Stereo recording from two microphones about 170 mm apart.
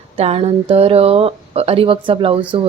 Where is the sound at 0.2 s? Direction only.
35° right (ahead or behind).